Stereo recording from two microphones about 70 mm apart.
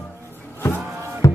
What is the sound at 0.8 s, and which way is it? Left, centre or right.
Music, right.